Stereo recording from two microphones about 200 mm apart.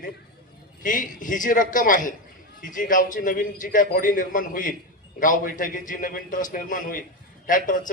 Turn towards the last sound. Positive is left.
turn(degrees=40)  # may be behind; listen again after turning